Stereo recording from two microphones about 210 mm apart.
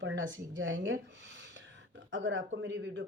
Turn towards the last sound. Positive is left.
turn(degrees=-60)  # may be behind; listen again after turning